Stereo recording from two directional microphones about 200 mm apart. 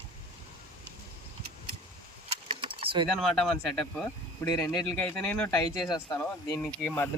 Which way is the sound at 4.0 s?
10° left (ahead or behind).